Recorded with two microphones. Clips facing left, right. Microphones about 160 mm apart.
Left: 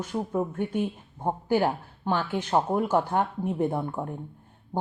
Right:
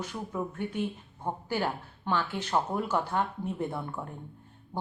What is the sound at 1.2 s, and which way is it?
Speech, 45° left (ahead or behind).